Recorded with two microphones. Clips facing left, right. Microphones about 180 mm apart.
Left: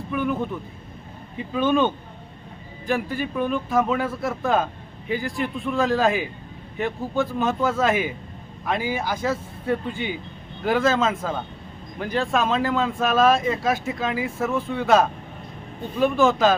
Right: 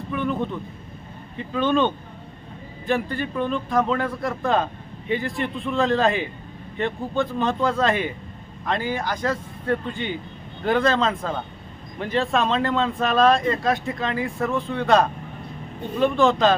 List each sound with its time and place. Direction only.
0.1 s speech: 5° left (ahead or behind)